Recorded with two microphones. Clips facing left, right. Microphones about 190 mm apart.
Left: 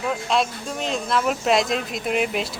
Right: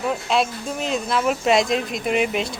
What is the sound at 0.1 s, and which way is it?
A woman's voice, centre (ahead or behind).